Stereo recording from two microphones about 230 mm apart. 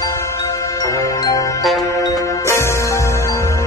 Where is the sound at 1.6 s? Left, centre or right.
Centre.